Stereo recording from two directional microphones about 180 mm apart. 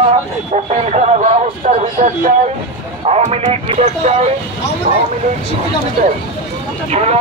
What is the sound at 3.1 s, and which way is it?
Speech, 35° right (ahead or behind).